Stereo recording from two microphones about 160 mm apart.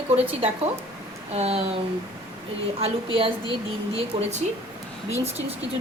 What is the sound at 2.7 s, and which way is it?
Speech, 35° right (ahead or behind).